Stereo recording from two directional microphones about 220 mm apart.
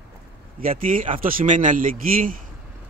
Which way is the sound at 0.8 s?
40° right (ahead or behind).